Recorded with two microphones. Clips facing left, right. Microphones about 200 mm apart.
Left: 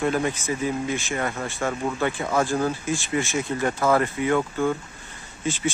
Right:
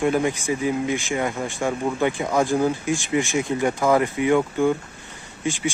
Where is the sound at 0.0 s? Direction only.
15° right (ahead or behind).